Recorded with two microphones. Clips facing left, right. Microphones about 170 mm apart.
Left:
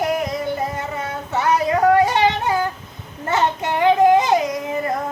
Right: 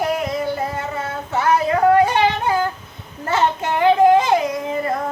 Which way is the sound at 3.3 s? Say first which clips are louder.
Right 1 dB; 20° left (ahead or behind).